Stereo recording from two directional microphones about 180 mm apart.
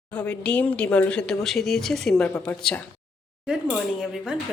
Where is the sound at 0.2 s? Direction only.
5° left (ahead or behind).